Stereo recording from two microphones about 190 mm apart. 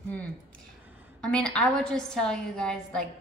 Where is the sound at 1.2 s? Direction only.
5° left (ahead or behind).